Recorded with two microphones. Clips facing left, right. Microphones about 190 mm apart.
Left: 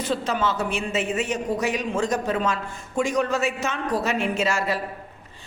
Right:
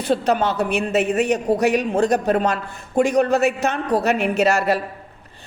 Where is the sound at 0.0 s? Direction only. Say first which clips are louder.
Right 5 dB; 60° right (ahead or behind).